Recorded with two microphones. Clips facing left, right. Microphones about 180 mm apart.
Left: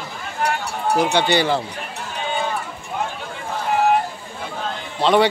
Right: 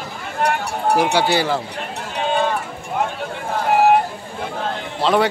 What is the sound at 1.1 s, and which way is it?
Speech, 5° right (ahead or behind).